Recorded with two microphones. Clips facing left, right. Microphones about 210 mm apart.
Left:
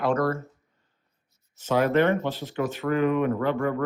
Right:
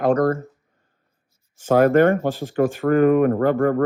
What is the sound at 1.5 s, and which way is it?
Speech, 50° right (ahead or behind).